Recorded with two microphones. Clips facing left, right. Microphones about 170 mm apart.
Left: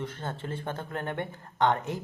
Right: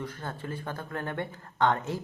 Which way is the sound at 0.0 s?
25° left (ahead or behind).